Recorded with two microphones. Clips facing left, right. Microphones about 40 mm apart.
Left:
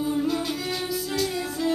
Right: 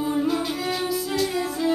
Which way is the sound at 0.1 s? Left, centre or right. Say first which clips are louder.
Right 2 dB; centre.